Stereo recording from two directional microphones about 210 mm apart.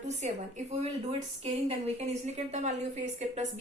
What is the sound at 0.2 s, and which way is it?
A woman's voice, 30° right (ahead or behind).